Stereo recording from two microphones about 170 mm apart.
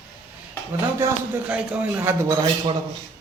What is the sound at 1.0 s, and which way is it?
A man's voice, 5° right (ahead or behind).